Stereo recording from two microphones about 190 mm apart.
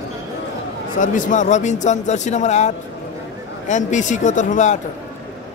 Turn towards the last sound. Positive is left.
turn(degrees=40)  # may be behind; listen again after turning